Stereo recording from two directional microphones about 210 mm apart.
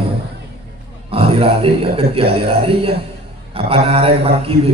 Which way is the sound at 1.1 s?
25° right (ahead or behind).